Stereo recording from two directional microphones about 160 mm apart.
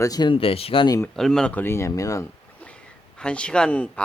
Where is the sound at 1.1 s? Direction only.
5° left (ahead or behind); by 2.3 s 20° left (ahead or behind).